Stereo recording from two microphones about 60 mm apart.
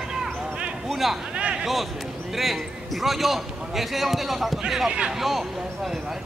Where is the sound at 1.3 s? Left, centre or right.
Centre.